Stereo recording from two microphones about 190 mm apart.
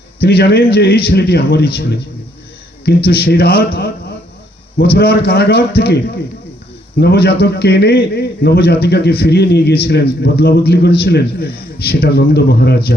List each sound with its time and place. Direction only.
0.2 s a man's voice: 60° left (ahead or behind)
3.1 s a man's voice: 55° left (ahead or behind)
7.0 s a man's voice: 60° left (ahead or behind)